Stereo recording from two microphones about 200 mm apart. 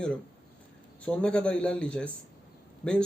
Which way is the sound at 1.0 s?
5° left (ahead or behind).